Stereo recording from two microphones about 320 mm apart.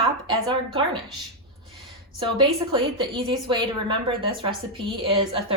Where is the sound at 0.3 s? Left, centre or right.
Centre.